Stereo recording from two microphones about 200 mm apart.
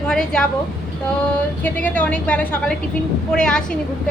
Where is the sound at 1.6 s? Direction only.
5° left (ahead or behind).